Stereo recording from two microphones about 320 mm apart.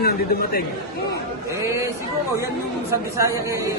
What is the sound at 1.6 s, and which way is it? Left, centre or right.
Speech, centre.